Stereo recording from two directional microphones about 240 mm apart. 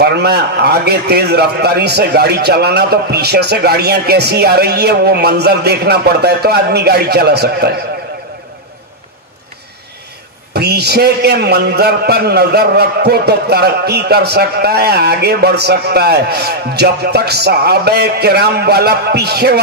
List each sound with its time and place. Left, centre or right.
0.0 s a man's voice: right
10.5 s a man's voice: right